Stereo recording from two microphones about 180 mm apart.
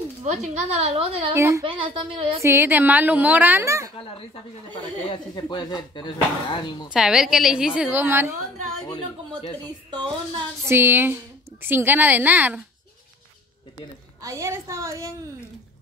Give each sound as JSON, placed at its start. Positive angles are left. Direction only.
{"t": 0.2, "sound": "a woman's voice", "side_deg": -40}
{"t": 1.3, "sound": "a woman's voice", "side_deg": -15}
{"t": 1.6, "sound": "a woman's voice", "side_deg": -30}
{"t": 2.4, "sound": "a woman's voice", "side_deg": -15}
{"t": 5.1, "sound": "speech", "side_deg": 25}
{"t": 6.9, "sound": "a woman's voice", "side_deg": -5}
{"t": 9.8, "sound": "music", "side_deg": -25}
{"t": 10.6, "sound": "a woman's voice", "side_deg": -15}
{"t": 14.2, "sound": "a woman's voice", "side_deg": -15}